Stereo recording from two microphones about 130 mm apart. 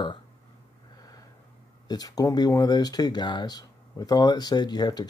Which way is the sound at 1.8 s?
30° left (ahead or behind).